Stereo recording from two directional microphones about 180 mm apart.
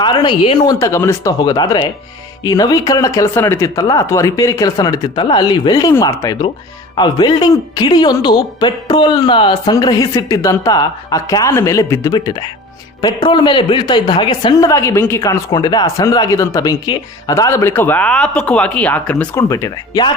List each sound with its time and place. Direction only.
0.0 s a woman's voice: 25° left (ahead or behind)